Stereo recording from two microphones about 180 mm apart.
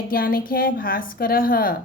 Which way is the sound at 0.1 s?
55° left (ahead or behind).